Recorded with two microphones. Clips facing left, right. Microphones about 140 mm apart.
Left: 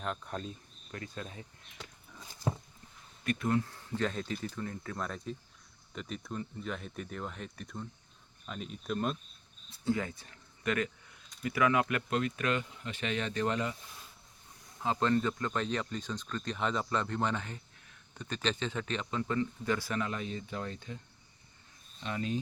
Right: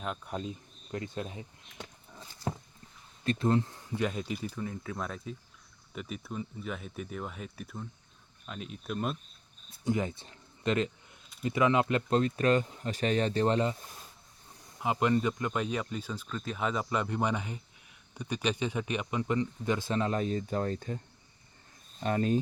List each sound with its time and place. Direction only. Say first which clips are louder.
0.0 s speech: right 2 dB; 5° right (ahead or behind)
0.9 s speech: right 6 dB; 25° right (ahead or behind)
3.2 s speech: right 3 dB; 25° right (ahead or behind); by 9.1 s 5° right (ahead or behind)
9.8 s speech: right 2 dB; 20° right (ahead or behind)
14.8 s speech: right 2 dB; 15° right (ahead or behind); by 21.0 s 45° right (ahead or behind)
22.0 s cricket: right 7 dB; 45° right (ahead or behind)